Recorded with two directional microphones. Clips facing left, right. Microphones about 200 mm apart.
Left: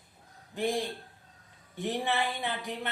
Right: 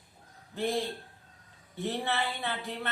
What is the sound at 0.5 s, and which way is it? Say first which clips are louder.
A man's voice: even; 15° left (ahead or behind).